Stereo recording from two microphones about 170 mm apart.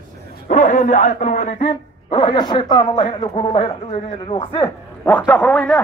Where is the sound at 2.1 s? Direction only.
30° left (ahead or behind).